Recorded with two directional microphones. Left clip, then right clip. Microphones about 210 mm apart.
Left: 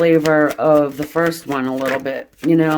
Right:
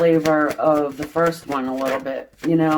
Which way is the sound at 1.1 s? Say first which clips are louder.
Even; 55° left (ahead or behind).